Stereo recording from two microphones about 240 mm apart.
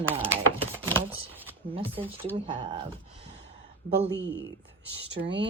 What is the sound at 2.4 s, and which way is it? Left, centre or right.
Speech, right.